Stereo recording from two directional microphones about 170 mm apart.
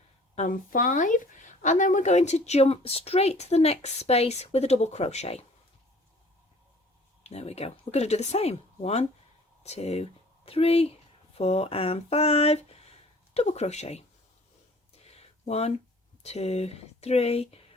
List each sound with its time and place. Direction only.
0.3 s speech: 50° left (ahead or behind)
7.3 s speech: 40° left (ahead or behind)
15.0 s a sound: 40° left (ahead or behind)
16.2 s speech: 40° left (ahead or behind)